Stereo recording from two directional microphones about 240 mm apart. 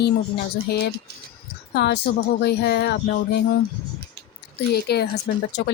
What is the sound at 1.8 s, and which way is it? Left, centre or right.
Speech, left.